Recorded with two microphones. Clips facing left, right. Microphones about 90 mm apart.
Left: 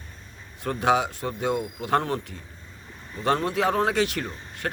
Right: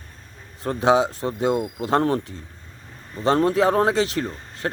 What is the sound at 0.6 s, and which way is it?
Speech, 30° right (ahead or behind).